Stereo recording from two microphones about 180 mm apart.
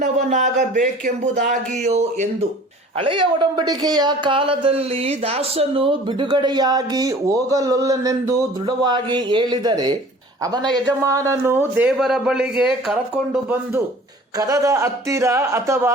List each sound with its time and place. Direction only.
0.0 s speech: 45° right (ahead or behind)
3.0 s a man's voice: 30° right (ahead or behind); by 13.8 s 10° right (ahead or behind)
14.3 s speech: 20° right (ahead or behind)